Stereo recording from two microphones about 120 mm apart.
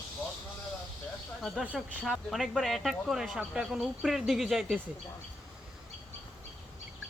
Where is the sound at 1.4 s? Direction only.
Centre (ahead or behind).